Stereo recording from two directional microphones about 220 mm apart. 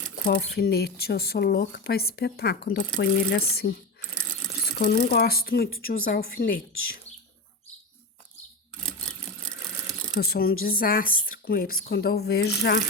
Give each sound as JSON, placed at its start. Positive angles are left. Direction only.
{"t": 0.3, "sound": "speech", "side_deg": 45}
{"t": 4.8, "sound": "speech", "side_deg": 40}
{"t": 8.9, "sound": "sewing machine", "side_deg": 5}
{"t": 10.2, "sound": "speech", "side_deg": 45}